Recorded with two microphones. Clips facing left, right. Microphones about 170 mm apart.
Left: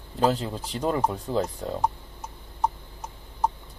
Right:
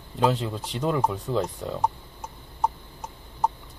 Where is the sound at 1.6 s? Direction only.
10° left (ahead or behind).